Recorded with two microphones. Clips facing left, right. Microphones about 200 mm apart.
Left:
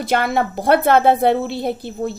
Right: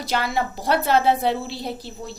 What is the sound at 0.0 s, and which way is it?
A woman's voice, 55° left (ahead or behind).